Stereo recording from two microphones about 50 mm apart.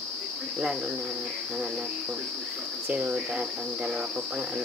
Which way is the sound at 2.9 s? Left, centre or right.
Right.